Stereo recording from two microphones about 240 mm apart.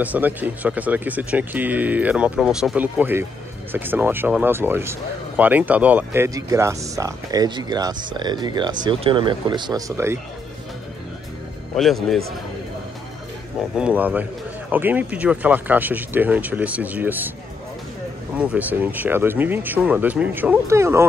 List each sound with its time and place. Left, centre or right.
0.0 s speech: centre
11.7 s speech: centre
13.7 s speech: centre
18.3 s speech: centre